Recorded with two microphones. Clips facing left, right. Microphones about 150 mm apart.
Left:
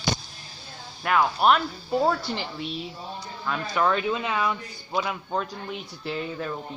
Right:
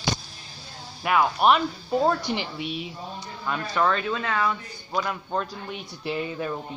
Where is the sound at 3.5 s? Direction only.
5° left (ahead or behind).